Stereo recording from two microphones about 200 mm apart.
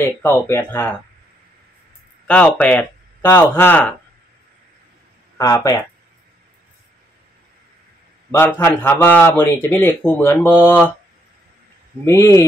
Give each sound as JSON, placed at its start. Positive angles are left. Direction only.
{"t": 0.0, "sound": "a man's voice", "side_deg": 10}
{"t": 2.2, "sound": "speech", "side_deg": 5}
{"t": 5.4, "sound": "a man's voice", "side_deg": 15}
{"t": 8.3, "sound": "a man's voice", "side_deg": 10}
{"t": 12.0, "sound": "a man's voice", "side_deg": 15}